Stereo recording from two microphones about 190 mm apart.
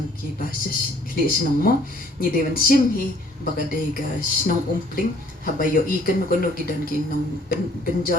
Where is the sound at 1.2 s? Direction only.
50° left (ahead or behind).